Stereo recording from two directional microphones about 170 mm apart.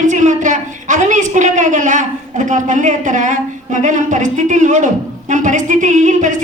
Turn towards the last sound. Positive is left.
turn(degrees=-45)  # may be behind; listen again after turning